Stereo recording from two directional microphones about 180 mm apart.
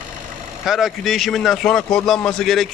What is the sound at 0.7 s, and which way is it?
A man's voice, centre (ahead or behind).